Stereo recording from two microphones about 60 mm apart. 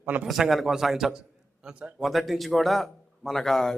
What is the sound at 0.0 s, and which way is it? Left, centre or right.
Speech, right.